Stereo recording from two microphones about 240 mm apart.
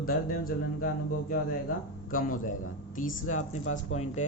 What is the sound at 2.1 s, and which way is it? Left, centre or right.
Speech, left.